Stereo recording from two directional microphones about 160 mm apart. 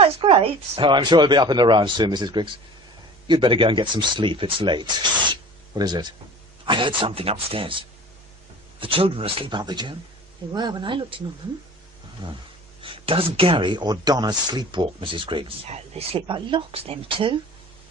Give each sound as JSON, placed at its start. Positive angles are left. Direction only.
{"t": 0.0, "sound": "speech", "side_deg": -30}
{"t": 5.3, "sound": "a sound", "side_deg": -25}
{"t": 6.7, "sound": "speech", "side_deg": -30}
{"t": 12.2, "sound": "speech", "side_deg": -30}